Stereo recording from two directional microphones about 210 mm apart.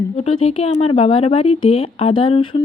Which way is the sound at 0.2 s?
30° left (ahead or behind).